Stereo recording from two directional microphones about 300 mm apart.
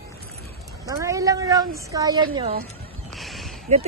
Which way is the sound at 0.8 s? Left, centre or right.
Centre.